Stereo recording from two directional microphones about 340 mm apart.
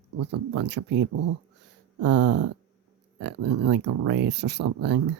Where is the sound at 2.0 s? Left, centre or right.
Right.